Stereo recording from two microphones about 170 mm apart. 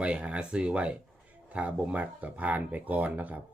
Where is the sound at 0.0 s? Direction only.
5° right (ahead or behind).